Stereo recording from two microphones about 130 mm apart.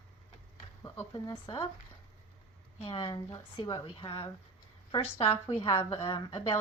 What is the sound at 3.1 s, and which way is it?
Speech, 30° left (ahead or behind).